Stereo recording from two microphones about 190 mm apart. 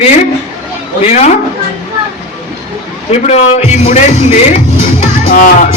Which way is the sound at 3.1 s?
35° left (ahead or behind).